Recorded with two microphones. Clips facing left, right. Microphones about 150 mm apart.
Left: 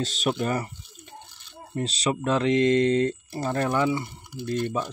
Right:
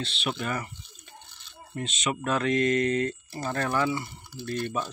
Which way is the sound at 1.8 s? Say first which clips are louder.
Left 4 dB; 35° left (ahead or behind).